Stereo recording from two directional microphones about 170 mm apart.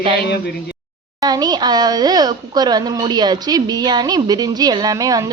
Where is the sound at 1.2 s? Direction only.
25° right (ahead or behind).